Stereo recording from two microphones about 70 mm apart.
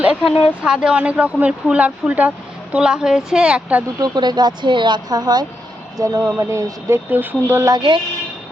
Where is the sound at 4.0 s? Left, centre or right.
Right.